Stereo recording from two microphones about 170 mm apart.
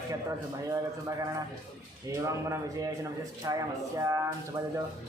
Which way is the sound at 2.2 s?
15° right (ahead or behind).